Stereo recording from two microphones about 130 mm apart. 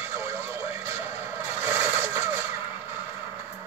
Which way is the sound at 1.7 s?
15° right (ahead or behind).